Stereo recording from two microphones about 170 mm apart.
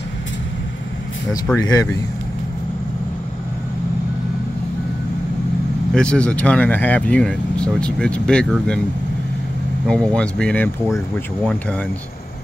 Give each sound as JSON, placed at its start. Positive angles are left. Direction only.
{"t": 1.6, "sound": "speech", "side_deg": 20}
{"t": 5.9, "sound": "speech", "side_deg": 5}
{"t": 9.8, "sound": "speech", "side_deg": 5}